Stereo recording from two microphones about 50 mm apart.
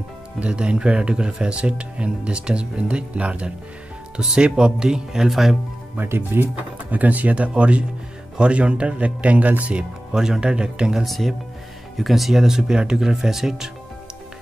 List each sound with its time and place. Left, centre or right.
0.4 s speech: right
5.9 s speech: right
6.9 s speech: right
10.1 s speech: centre
11.1 s speech: centre